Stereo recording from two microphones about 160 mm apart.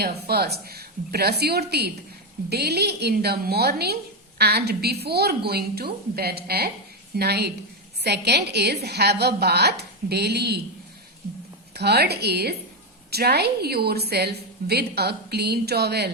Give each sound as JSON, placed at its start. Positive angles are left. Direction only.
{"t": 0.0, "sound": "a woman's voice", "side_deg": -85}
{"t": 7.2, "sound": "a woman's voice", "side_deg": -90}
{"t": 11.7, "sound": "a woman's voice", "side_deg": -90}